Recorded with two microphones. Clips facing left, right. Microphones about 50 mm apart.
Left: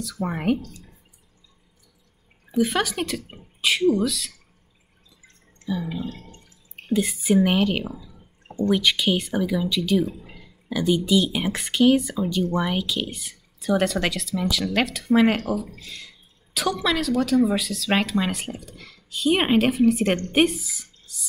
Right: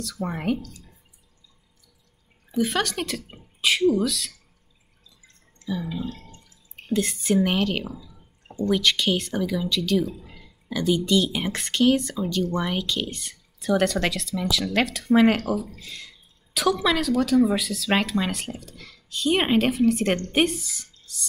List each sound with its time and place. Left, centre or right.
0.0 s speech: centre
2.5 s speech: centre
5.6 s a sound: left
6.9 s speech: centre